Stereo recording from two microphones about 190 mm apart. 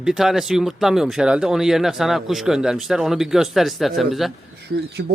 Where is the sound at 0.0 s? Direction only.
Centre (ahead or behind).